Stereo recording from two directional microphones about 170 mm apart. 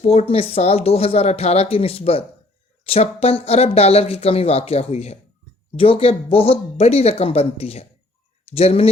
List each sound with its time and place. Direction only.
0.0 s a woman's voice: 40° left (ahead or behind)